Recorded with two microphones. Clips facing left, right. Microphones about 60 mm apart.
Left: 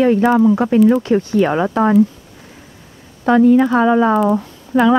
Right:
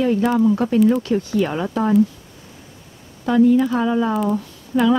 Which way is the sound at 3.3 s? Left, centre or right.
Left.